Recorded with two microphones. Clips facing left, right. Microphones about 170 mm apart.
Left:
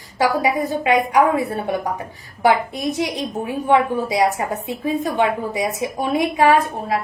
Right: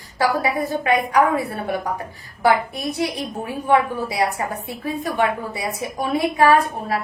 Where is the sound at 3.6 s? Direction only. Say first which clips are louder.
Left 1 dB; 20° left (ahead or behind).